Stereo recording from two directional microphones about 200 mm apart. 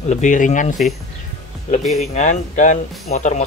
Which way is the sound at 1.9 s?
35° left (ahead or behind).